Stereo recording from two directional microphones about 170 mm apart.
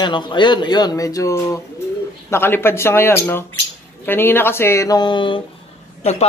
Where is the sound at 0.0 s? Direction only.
25° left (ahead or behind).